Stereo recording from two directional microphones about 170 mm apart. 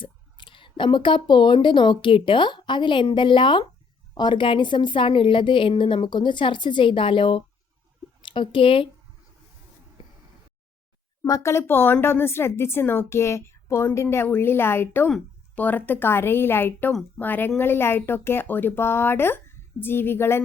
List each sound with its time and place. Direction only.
0.0 s a woman's voice: 30° left (ahead or behind)
11.2 s a woman's voice: 20° left (ahead or behind)